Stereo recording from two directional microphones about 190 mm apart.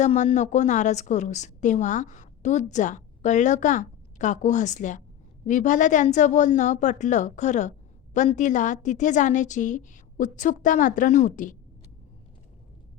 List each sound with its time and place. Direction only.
0.0 s a woman's voice: 35° left (ahead or behind)